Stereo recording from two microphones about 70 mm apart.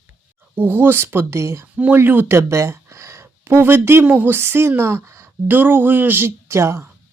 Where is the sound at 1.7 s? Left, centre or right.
Centre.